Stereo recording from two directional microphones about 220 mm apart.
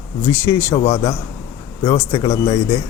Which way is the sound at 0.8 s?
30° left (ahead or behind).